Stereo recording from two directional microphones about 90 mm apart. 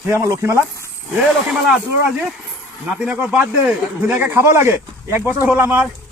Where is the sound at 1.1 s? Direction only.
5° right (ahead or behind).